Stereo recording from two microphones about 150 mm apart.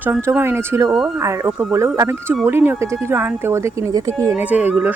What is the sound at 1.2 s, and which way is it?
Speech, 15° right (ahead or behind).